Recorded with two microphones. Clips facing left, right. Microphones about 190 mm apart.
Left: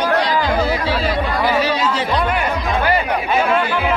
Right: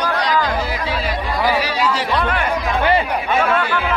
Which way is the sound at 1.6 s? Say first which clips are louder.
Left 1 dB; 20° left (ahead or behind).